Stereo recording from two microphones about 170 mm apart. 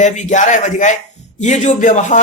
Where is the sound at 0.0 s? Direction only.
45° left (ahead or behind).